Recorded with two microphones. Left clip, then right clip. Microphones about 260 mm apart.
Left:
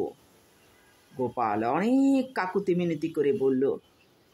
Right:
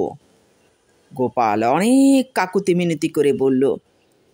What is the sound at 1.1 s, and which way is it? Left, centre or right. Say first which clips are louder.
Speech: right 9 dB; right.